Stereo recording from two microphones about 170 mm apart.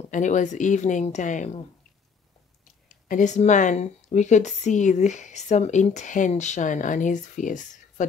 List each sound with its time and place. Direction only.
0.1 s speech: 45° left (ahead or behind)
3.1 s speech: 45° left (ahead or behind)